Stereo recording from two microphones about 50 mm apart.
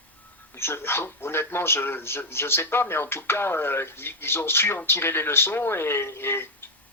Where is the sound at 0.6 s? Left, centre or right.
Left.